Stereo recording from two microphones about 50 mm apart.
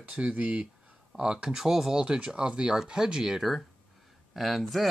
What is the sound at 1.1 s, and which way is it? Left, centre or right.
Speech, centre.